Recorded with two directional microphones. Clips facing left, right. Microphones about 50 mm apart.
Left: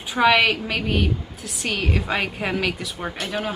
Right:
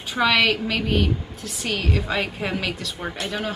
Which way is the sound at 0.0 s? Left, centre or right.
Centre.